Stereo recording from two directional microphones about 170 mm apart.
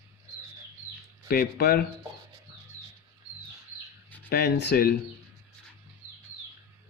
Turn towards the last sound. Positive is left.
turn(degrees=75)  # may be behind; listen again after turning